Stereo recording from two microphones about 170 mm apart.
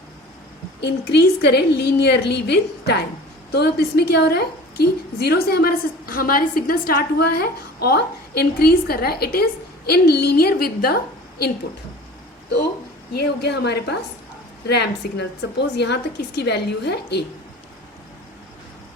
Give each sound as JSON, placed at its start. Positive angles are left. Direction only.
{"t": 0.8, "sound": "a woman's voice", "side_deg": 70}
{"t": 13.1, "sound": "a woman's voice", "side_deg": 80}